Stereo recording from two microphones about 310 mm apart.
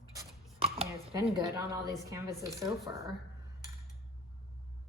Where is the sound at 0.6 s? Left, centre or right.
Centre.